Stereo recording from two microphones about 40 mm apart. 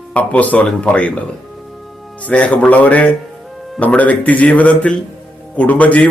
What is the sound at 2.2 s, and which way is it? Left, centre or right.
A man's voice, left.